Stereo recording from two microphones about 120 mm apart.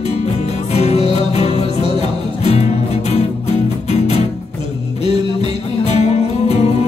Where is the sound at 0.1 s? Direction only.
65° left (ahead or behind).